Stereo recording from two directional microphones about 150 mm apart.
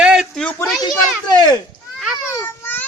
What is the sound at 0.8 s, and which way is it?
Speech, 30° left (ahead or behind).